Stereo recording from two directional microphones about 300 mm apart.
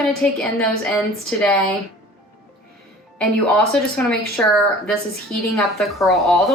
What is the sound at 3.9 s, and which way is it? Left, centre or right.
A woman's voice, centre.